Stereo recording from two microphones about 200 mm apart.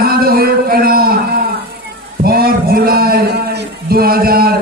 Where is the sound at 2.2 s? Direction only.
50° right (ahead or behind).